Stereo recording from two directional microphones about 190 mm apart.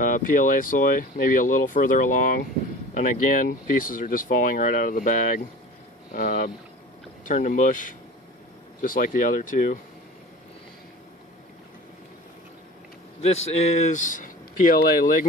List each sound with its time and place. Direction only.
0.0 s speech: 45° left (ahead or behind)
8.8 s speech: 45° left (ahead or behind)
13.6 s speech: 40° left (ahead or behind)